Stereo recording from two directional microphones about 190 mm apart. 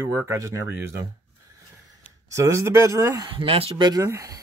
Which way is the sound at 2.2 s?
15° right (ahead or behind).